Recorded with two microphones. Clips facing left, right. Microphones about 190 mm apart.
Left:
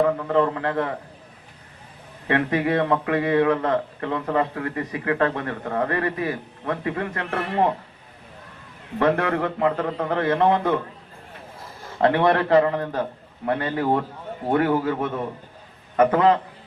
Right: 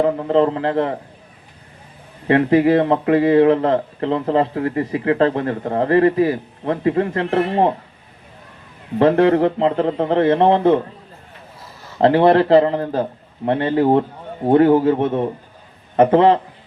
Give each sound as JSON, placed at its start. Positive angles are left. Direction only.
{"t": 0.0, "sound": "a man's voice", "side_deg": -25}
{"t": 2.2, "sound": "a man's voice", "side_deg": -30}
{"t": 9.0, "sound": "a man's voice", "side_deg": -25}
{"t": 11.9, "sound": "a man's voice", "side_deg": -25}